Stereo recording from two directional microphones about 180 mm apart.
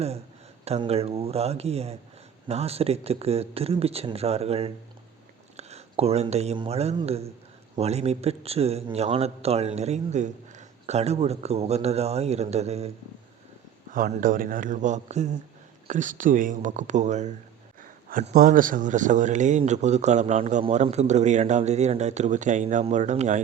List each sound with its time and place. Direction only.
0.6 s speech: 35° right (ahead or behind)
13.9 s speech: 50° right (ahead or behind)